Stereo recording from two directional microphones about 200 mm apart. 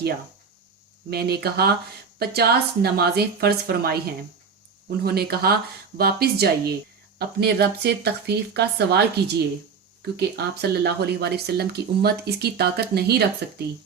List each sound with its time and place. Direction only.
1.1 s speech: 55° right (ahead or behind)